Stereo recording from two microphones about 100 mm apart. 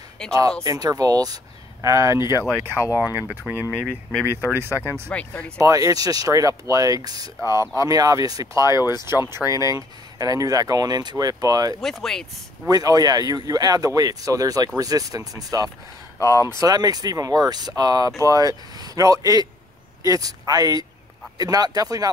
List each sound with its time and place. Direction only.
0.2 s speech: 5° left (ahead or behind)
0.7 s speech: 40° right (ahead or behind); by 5.1 s 25° right (ahead or behind)
5.1 s speech: 10° left (ahead or behind)
5.6 s speech: 35° right (ahead or behind)
11.8 s speech: 5° left (ahead or behind)
12.6 s speech: 35° right (ahead or behind)
16.2 s speech: 30° left (ahead or behind)
16.5 s speech: 40° right (ahead or behind)